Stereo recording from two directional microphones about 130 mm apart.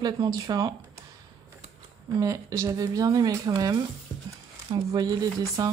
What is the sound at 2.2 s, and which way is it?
Speech, 25° right (ahead or behind).